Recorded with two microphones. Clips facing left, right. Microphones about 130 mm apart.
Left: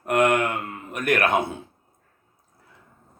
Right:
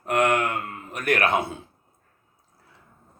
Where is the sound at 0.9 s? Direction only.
55° left (ahead or behind).